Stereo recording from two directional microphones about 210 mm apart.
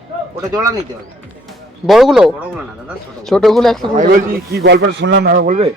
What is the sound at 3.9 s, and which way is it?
A man's voice, 40° right (ahead or behind).